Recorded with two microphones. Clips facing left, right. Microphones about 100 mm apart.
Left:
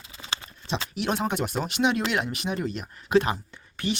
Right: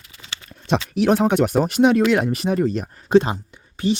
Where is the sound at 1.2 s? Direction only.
65° right (ahead or behind).